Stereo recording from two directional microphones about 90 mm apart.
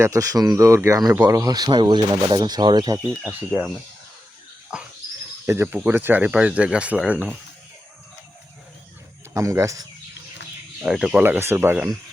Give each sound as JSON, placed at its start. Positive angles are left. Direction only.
{"t": 0.0, "sound": "speech", "side_deg": -35}
{"t": 3.2, "sound": "speech", "side_deg": -20}
{"t": 5.5, "sound": "speech", "side_deg": -25}
{"t": 9.3, "sound": "speech", "side_deg": -35}
{"t": 10.8, "sound": "speech", "side_deg": -5}
{"t": 11.2, "sound": "speech", "side_deg": -25}